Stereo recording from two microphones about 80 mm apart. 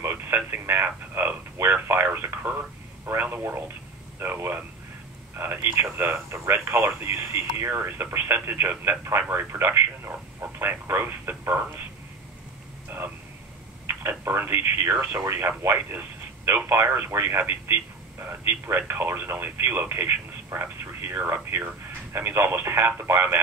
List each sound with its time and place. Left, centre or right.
0.0 s radio: right
0.5 s speech: right
13.8 s speech: right